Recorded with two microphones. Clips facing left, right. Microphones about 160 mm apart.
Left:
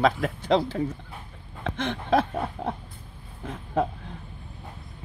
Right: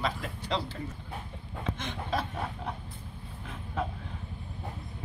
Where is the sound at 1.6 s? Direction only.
65° left (ahead or behind).